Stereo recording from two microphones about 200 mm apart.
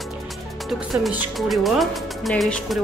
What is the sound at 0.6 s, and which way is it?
Speech, centre (ahead or behind).